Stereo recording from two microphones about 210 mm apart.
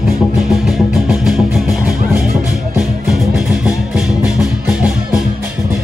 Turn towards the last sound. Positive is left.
turn(degrees=-5)  # may be behind; listen again after turning